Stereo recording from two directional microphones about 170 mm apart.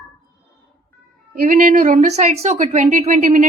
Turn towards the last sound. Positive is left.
turn(degrees=-50)  # may be behind; listen again after turning